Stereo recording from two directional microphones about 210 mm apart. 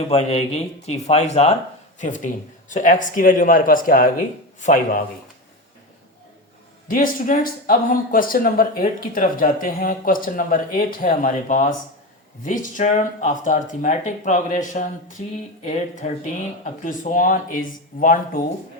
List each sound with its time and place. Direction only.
0.1 s speech: 30° left (ahead or behind)
6.8 s speech: 40° left (ahead or behind)